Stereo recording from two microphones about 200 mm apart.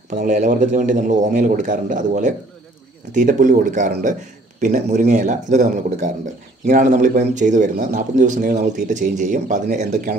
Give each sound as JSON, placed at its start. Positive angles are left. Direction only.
{"t": 0.1, "sound": "speech", "side_deg": -40}